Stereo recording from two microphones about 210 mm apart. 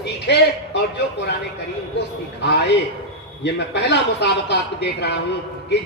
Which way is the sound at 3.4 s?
55° left (ahead or behind).